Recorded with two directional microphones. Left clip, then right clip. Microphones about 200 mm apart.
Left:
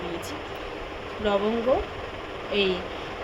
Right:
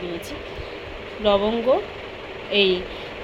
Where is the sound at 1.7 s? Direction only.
15° right (ahead or behind).